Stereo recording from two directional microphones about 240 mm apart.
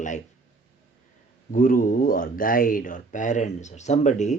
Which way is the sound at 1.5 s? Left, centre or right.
Left.